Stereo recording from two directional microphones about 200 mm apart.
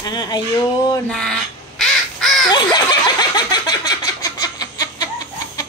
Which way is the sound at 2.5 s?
20° left (ahead or behind).